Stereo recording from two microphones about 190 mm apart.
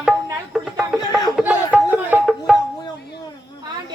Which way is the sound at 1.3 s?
5° right (ahead or behind).